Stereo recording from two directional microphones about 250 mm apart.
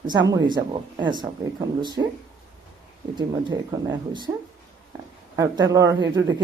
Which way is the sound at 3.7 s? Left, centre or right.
Centre.